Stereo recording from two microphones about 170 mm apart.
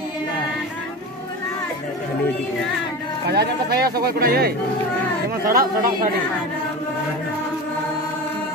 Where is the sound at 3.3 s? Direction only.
70° right (ahead or behind).